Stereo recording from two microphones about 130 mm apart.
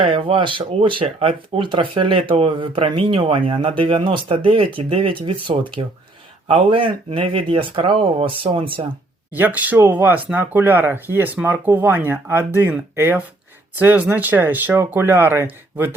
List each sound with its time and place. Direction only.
0.0 s speech: 45° right (ahead or behind)
9.3 s speech: 15° right (ahead or behind)